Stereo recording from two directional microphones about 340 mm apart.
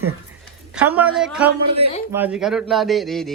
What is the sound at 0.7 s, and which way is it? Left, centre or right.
A man's voice, centre.